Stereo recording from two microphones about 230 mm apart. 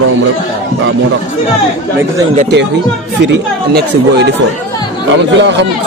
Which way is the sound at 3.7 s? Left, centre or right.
Right.